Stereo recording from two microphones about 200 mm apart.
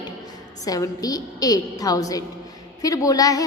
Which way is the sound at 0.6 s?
20° left (ahead or behind).